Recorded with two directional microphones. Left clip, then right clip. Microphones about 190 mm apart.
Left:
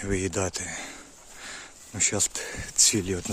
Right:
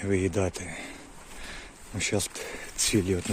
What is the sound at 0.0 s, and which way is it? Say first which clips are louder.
Speech: right 1 dB; 15° left (ahead or behind).